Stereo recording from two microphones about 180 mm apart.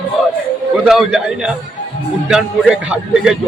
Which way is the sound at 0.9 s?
5° right (ahead or behind).